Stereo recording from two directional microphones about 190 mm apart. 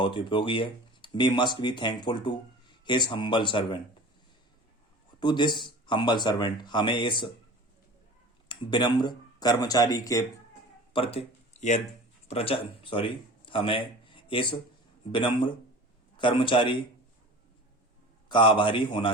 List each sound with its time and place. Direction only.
0.0 s speech: 25° left (ahead or behind)
5.2 s speech: 25° left (ahead or behind)
8.4 s speech: 25° left (ahead or behind)
10.9 s speech: 30° left (ahead or behind)
18.3 s speech: 25° left (ahead or behind)